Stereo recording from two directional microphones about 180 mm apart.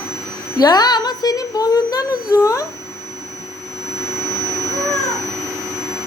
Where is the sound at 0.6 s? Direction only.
20° left (ahead or behind).